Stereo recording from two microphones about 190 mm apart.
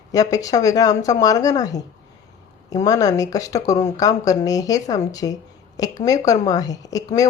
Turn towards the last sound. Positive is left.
turn(degrees=20)  # may be behind; listen again after turning